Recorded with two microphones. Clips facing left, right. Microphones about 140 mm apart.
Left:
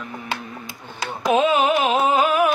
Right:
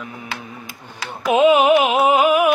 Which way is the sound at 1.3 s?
15° right (ahead or behind).